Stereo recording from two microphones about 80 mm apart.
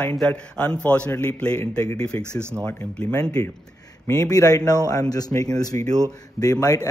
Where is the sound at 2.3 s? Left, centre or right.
Right.